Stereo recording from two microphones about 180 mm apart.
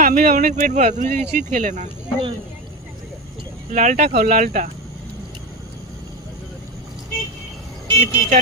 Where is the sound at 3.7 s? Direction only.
45° right (ahead or behind).